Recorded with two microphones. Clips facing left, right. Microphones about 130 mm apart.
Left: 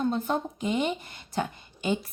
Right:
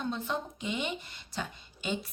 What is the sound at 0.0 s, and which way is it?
A woman's voice, 45° left (ahead or behind).